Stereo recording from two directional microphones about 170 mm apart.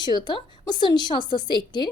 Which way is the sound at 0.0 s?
25° left (ahead or behind).